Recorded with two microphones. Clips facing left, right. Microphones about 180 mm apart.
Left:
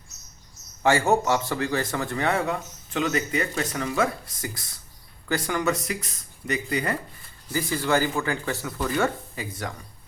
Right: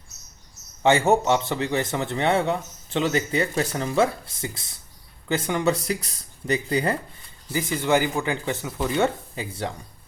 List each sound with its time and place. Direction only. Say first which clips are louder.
0.8 s speech: right 2 dB; 25° right (ahead or behind)
7.5 s speech: right 2 dB; 20° right (ahead or behind)